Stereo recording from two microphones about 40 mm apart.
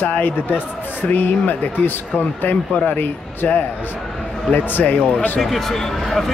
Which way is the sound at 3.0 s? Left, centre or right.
Left.